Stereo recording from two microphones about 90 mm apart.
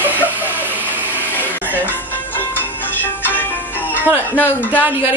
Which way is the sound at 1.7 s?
20° left (ahead or behind).